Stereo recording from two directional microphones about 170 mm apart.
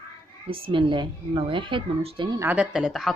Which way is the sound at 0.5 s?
30° right (ahead or behind).